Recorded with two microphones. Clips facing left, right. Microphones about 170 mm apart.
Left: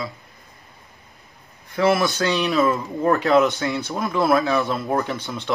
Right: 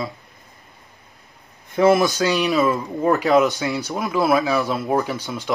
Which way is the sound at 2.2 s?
10° right (ahead or behind).